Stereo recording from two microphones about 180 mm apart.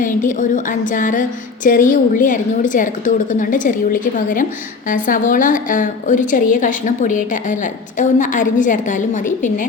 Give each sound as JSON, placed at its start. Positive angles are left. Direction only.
{"t": 0.0, "sound": "a woman's voice", "side_deg": 45}